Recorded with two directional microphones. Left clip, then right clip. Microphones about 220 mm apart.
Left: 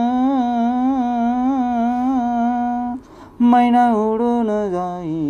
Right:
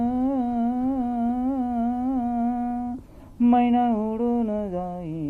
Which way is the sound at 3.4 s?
40° left (ahead or behind).